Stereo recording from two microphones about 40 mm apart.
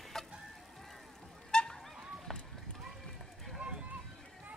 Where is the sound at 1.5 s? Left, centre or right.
Centre.